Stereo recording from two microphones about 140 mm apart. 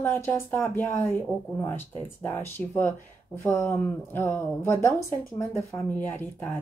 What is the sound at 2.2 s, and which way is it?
Speech, 15° left (ahead or behind).